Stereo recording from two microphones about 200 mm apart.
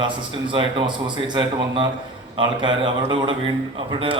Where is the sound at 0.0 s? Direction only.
25° right (ahead or behind).